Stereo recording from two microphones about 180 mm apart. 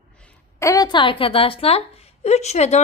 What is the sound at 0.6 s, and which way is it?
A woman's voice, 20° left (ahead or behind).